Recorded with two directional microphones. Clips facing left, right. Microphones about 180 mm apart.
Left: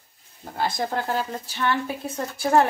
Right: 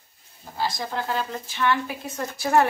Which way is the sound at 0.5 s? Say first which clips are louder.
Left 2 dB; 55° left (ahead or behind).